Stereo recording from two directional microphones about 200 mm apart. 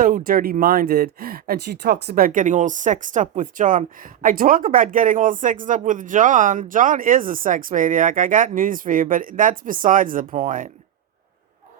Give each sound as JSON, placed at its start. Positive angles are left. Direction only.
{"t": 0.3, "sound": "speech", "side_deg": -45}